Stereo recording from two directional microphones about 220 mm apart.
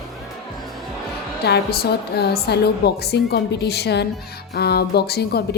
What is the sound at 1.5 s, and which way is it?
A woman's voice, 45° left (ahead or behind).